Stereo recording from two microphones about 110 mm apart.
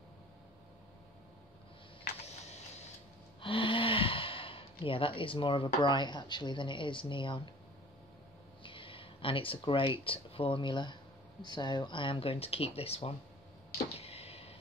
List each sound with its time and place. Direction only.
3.3 s speech: 50° left (ahead or behind)
8.6 s speech: 50° left (ahead or behind)
13.9 s a sound: 65° left (ahead or behind)